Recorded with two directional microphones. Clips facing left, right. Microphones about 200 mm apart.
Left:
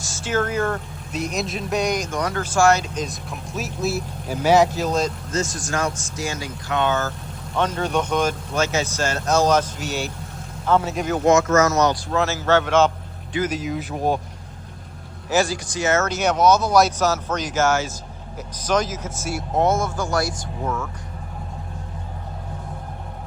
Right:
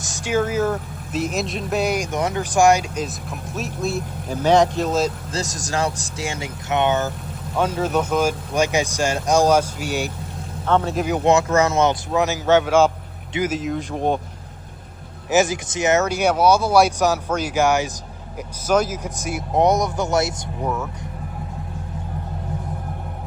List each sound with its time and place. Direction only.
0.0 s speech: 15° right (ahead or behind)
2.0 s speech: 20° right (ahead or behind); by 5.1 s 5° right (ahead or behind)
5.3 s speech: 30° right (ahead or behind)
7.5 s speech: 10° right (ahead or behind)
10.8 s speech: centre (ahead or behind)
11.4 s speech: 30° right (ahead or behind); by 14.2 s 5° left (ahead or behind)
15.3 s speech: 20° right (ahead or behind)